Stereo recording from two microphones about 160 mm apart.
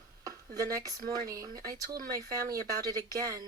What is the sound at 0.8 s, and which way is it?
Speech, 20° right (ahead or behind).